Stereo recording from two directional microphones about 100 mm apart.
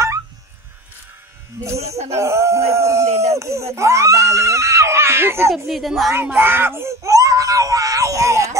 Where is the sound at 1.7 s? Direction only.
90° right.